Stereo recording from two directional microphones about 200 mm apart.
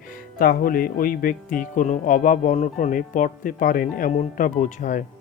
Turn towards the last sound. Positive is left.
turn(degrees=40)  # may be behind; listen again after turning